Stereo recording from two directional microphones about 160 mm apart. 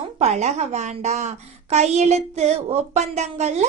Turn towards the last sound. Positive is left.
turn(degrees=-45)  # may be behind; listen again after turning